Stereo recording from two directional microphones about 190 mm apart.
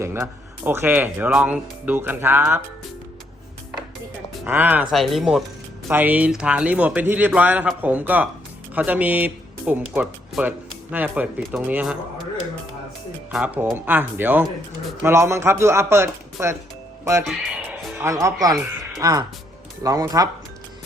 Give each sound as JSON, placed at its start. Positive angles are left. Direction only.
{"t": 0.0, "sound": "speech", "side_deg": -15}
{"t": 4.4, "sound": "speech", "side_deg": -10}
{"t": 13.3, "sound": "speech", "side_deg": -5}
{"t": 17.2, "sound": "music", "side_deg": 0}
{"t": 17.9, "sound": "speech", "side_deg": -15}